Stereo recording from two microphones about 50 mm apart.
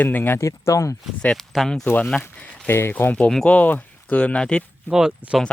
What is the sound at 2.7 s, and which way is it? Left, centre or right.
Speech, left.